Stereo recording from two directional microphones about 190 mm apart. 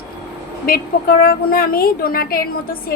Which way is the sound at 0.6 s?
50° left (ahead or behind).